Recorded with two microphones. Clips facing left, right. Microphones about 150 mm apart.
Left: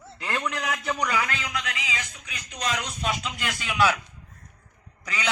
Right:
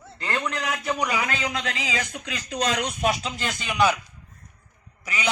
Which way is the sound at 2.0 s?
80° right.